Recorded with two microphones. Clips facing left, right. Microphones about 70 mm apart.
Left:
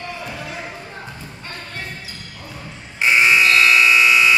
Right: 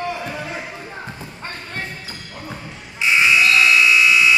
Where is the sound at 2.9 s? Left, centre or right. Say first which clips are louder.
Left 1 dB; left.